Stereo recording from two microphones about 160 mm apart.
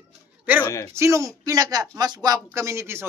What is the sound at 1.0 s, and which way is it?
A man's voice, 20° right (ahead or behind).